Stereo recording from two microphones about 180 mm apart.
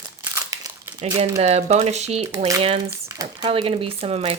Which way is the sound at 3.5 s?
30° right (ahead or behind).